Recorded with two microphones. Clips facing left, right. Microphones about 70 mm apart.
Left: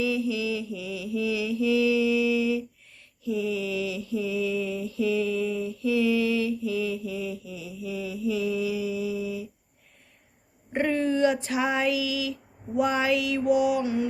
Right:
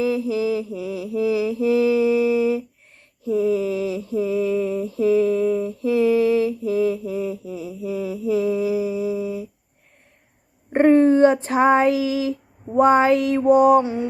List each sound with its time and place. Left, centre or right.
0.0 s mantra: right
10.7 s a sound: right
13.8 s mantra: right